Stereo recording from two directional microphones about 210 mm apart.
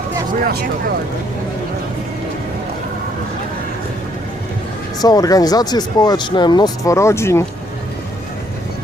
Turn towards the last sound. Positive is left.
turn(degrees=10)  # may be behind; listen again after turning